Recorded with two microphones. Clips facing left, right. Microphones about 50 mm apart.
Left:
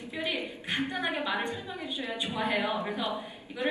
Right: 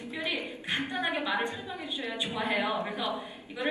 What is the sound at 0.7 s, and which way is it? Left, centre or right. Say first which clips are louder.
A woman's voice: even; right.